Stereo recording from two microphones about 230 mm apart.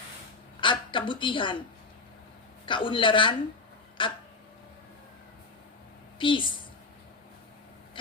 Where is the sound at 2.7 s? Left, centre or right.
Left.